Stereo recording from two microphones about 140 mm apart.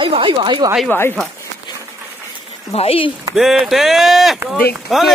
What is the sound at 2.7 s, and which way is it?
Speech, 45° left (ahead or behind).